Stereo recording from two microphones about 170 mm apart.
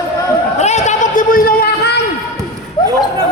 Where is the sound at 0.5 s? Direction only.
40° left (ahead or behind); by 2.0 s 70° left (ahead or behind).